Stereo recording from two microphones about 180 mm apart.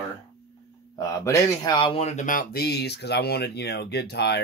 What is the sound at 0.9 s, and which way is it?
Speech, 20° left (ahead or behind).